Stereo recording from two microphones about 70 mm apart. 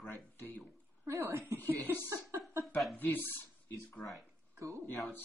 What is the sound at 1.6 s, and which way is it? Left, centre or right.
Speech, left.